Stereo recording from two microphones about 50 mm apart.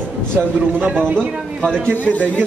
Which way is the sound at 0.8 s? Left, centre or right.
Right.